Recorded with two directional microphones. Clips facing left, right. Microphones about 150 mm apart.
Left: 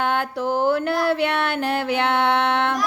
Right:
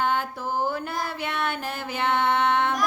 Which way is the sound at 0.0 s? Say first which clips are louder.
Left 4 dB; 70° left (ahead or behind).